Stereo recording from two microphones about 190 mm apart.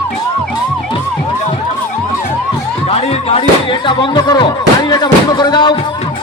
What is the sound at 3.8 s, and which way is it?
Speech, 25° left (ahead or behind).